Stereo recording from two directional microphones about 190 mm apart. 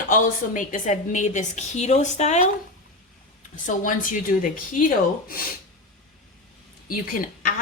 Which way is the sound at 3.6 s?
45° left (ahead or behind).